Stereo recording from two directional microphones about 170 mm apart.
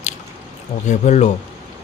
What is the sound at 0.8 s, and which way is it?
Speech, 40° left (ahead or behind).